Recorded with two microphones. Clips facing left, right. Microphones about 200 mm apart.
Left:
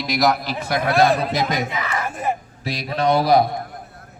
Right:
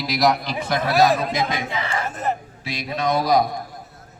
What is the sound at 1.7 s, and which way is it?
Speech, 30° right (ahead or behind).